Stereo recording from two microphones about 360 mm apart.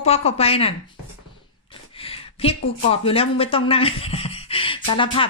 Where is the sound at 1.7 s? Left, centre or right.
Centre.